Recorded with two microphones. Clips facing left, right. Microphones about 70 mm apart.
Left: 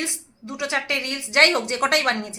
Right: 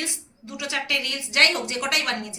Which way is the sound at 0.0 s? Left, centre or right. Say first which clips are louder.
Left 3 dB; left.